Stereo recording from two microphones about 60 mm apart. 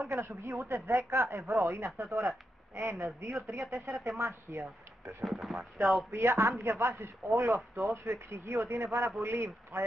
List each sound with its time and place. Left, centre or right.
0.0 s a man's voice: right
5.2 s speech: centre
5.8 s a man's voice: right